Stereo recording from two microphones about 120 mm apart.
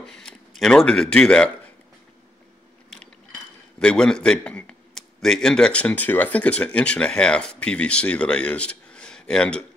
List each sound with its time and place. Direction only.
0.0 s speech: 5° left (ahead or behind)
3.8 s a man's voice: 5° left (ahead or behind)